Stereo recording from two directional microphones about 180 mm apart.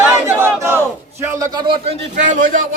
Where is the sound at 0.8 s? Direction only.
15° right (ahead or behind).